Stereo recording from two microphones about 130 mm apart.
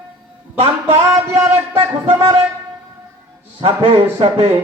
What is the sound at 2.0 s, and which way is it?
Speech, 40° right (ahead or behind).